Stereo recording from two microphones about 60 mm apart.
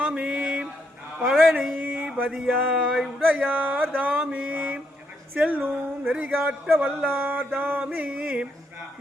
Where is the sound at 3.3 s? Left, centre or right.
Right.